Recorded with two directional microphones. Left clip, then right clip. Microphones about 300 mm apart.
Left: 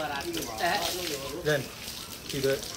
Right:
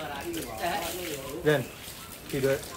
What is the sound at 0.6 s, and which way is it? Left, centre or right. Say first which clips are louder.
Speech: left 3 dB; left.